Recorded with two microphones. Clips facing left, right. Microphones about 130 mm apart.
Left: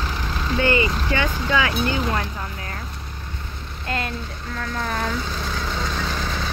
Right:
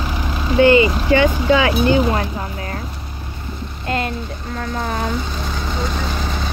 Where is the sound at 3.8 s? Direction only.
25° right (ahead or behind).